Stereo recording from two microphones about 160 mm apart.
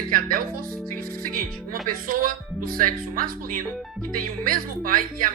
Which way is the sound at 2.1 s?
60° right (ahead or behind).